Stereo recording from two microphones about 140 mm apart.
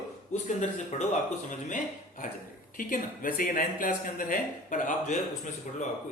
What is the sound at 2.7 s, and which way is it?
Speech, 90° left.